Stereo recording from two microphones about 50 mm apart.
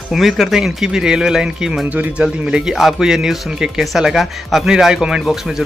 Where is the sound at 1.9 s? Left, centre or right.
Right.